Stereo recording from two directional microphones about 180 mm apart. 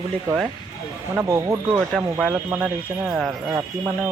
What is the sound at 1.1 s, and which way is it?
Speech, 15° right (ahead or behind).